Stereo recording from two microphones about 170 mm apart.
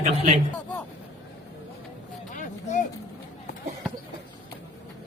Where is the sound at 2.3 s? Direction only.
45° left (ahead or behind).